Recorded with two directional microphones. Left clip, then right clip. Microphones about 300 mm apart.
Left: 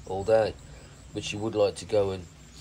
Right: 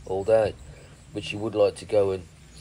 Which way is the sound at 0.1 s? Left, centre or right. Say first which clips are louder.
Right 2 dB; centre.